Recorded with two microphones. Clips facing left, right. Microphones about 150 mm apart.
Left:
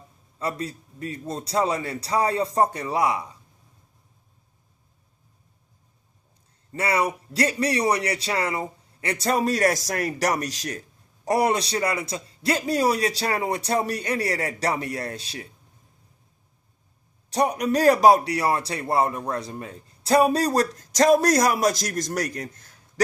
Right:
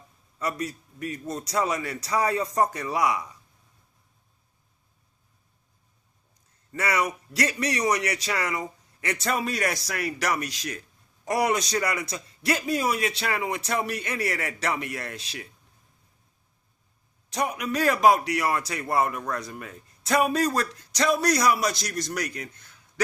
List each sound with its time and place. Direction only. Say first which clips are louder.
0.3 s a man's voice: left 1 dB; 30° left (ahead or behind)
6.7 s a man's voice: left 3 dB; 30° left (ahead or behind)
17.2 s a man's voice: left 6 dB; 35° left (ahead or behind)